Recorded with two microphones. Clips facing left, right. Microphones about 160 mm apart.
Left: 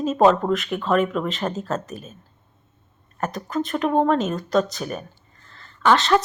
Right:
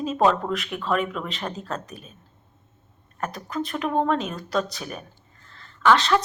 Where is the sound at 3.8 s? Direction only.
35° left (ahead or behind).